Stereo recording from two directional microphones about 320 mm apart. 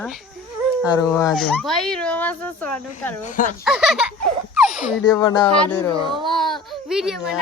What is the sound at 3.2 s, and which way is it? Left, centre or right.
Speech, left.